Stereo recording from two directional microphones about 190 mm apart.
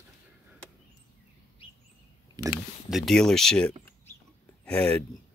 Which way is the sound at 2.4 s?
20° right (ahead or behind).